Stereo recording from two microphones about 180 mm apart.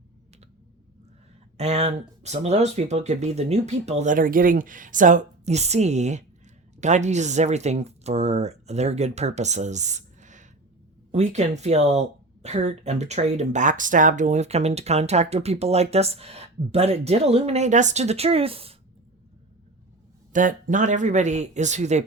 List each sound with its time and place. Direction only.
1.5 s speech: 35° right (ahead or behind)
20.3 s speech: 45° right (ahead or behind)